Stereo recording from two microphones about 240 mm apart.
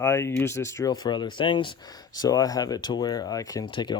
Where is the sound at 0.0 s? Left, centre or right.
Centre.